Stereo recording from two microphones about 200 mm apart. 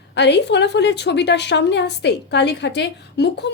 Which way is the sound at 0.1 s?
60° left (ahead or behind).